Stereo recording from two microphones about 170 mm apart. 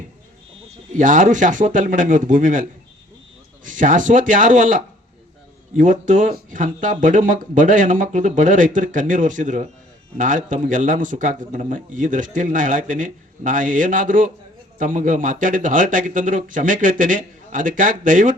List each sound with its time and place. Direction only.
0.9 s a man's voice: 50° right (ahead or behind)